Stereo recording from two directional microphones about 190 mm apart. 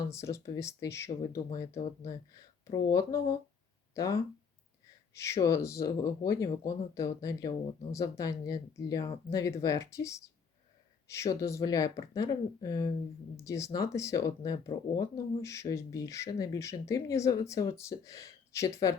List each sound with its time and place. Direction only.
0.1 s speech: 15° left (ahead or behind)